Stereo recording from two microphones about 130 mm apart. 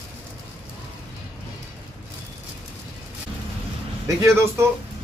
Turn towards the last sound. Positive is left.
turn(degrees=-20)  # may be behind; listen again after turning